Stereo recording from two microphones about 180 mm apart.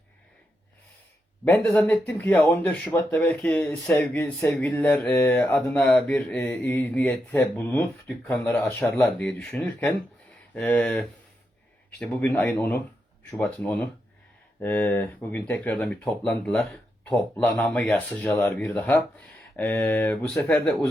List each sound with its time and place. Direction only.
1.6 s speech: 5° left (ahead or behind)